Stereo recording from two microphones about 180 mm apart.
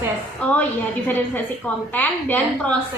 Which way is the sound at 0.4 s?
10° left (ahead or behind).